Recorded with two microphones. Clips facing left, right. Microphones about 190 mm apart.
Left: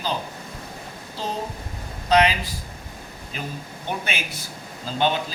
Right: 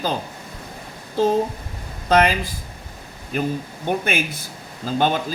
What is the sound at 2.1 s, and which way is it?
A man's voice, 50° right (ahead or behind).